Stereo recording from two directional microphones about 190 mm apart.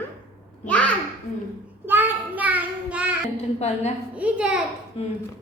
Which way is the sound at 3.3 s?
35° left (ahead or behind).